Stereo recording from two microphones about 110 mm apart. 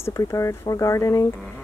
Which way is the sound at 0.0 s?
30° left (ahead or behind).